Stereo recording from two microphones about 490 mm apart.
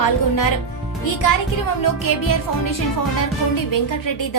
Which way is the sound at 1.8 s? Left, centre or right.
Left.